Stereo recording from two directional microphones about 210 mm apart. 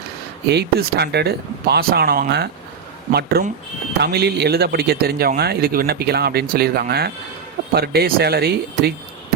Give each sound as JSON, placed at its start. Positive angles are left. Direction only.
{"t": 0.4, "sound": "speech", "side_deg": -50}